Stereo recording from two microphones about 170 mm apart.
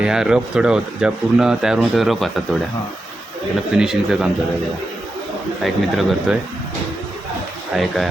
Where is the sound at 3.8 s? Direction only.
5° right (ahead or behind).